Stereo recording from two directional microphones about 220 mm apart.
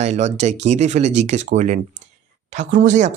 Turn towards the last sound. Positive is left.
turn(degrees=-35)  # may be behind; listen again after turning